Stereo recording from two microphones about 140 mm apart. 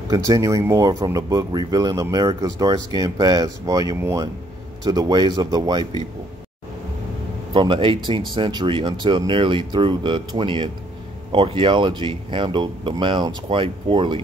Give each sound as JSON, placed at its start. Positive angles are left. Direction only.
{"t": 0.1, "sound": "speech", "side_deg": -25}
{"t": 7.5, "sound": "speech", "side_deg": -35}